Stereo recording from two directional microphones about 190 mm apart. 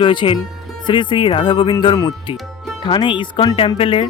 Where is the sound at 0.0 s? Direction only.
25° left (ahead or behind).